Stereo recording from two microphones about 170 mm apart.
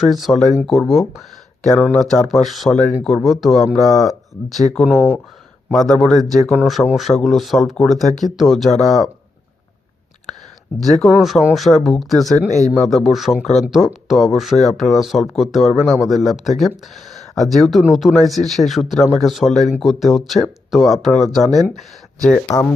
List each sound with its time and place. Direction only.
0.0 s speech: centre (ahead or behind)
10.8 s speech: centre (ahead or behind)
12.5 s a man's voice: 40° left (ahead or behind)
12.7 s speech: centre (ahead or behind)